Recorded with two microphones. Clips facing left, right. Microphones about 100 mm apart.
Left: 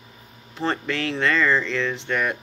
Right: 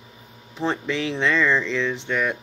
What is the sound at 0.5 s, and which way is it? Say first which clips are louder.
Speech: right 1 dB; 15° right (ahead or behind).